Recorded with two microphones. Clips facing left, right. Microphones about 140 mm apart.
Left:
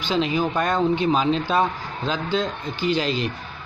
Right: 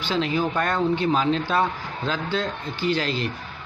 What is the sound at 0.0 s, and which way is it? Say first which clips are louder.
A man's voice: left 1 dB; 15° left (ahead or behind).